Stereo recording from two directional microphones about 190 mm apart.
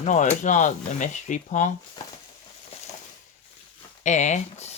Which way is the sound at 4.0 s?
40° left (ahead or behind).